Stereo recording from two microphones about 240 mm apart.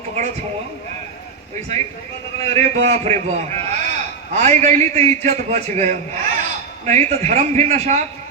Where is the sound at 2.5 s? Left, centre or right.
Right.